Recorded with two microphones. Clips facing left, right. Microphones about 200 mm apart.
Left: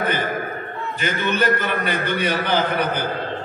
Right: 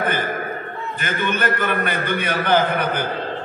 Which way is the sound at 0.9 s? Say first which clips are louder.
Left 2 dB; 50° right (ahead or behind).